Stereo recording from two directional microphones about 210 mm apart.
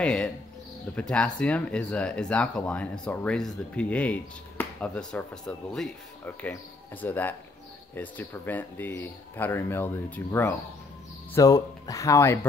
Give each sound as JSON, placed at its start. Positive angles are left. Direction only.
{"t": 0.0, "sound": "speech", "side_deg": 5}